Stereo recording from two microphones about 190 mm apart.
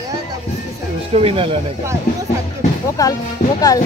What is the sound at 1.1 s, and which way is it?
Speech, 30° right (ahead or behind).